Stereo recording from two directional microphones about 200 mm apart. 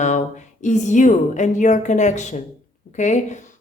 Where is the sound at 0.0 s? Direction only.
35° left (ahead or behind).